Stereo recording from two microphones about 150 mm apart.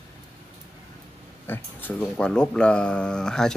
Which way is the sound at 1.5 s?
10° left (ahead or behind).